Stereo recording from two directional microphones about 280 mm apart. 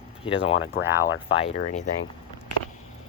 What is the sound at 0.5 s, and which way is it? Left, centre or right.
Speech, left.